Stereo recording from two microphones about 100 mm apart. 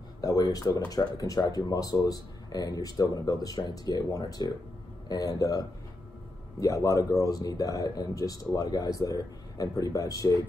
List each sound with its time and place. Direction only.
0.2 s speech: 35° left (ahead or behind)